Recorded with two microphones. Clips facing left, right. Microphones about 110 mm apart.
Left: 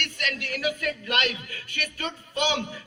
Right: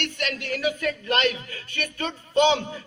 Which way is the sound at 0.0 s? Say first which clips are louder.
Right 3 dB; 35° right (ahead or behind).